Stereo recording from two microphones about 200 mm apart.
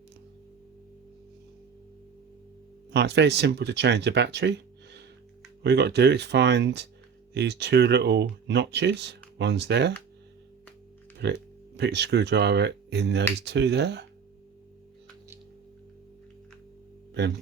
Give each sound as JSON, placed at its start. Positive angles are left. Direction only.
{"t": 2.9, "sound": "speech", "side_deg": -60}
{"t": 11.2, "sound": "speech", "side_deg": -55}